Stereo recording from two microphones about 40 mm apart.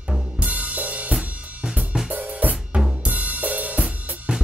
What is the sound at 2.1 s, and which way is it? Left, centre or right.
Drum kit, right.